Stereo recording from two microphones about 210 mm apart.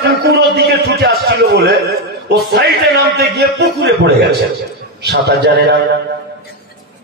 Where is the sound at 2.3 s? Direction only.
50° right (ahead or behind).